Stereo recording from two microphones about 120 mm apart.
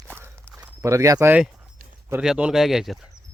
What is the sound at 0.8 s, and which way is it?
Speech, 25° right (ahead or behind).